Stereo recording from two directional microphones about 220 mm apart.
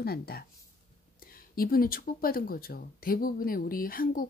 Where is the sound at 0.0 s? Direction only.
45° left (ahead or behind).